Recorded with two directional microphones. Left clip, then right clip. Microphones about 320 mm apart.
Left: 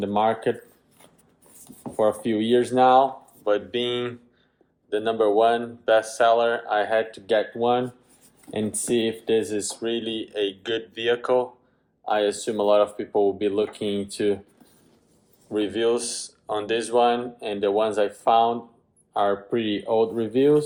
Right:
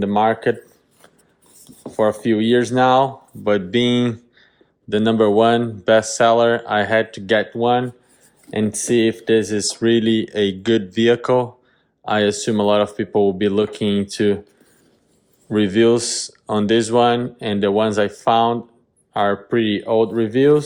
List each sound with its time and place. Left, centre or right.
0.0 s speech: right
2.0 s speech: right
15.5 s speech: right